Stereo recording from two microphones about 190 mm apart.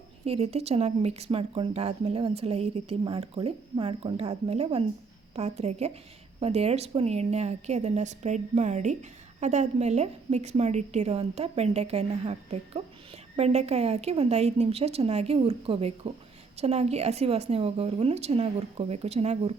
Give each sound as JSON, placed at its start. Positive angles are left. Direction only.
{"t": 0.3, "sound": "a woman's voice", "side_deg": -30}